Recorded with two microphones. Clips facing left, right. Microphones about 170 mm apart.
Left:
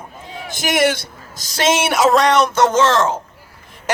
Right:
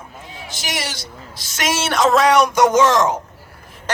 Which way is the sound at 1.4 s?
35° left (ahead or behind).